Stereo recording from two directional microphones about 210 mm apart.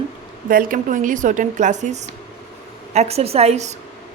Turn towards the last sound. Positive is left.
turn(degrees=-30)  # may be behind; listen again after turning